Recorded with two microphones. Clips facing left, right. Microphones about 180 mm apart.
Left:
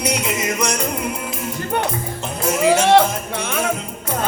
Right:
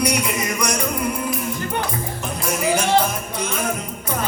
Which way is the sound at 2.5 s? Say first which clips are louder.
Left 5 dB; 25° left (ahead or behind).